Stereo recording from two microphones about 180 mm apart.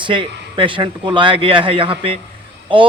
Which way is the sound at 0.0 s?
25° right (ahead or behind).